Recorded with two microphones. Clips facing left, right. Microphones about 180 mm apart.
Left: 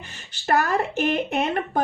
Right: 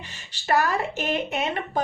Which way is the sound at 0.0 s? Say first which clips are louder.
Left 5 dB; 55° left (ahead or behind).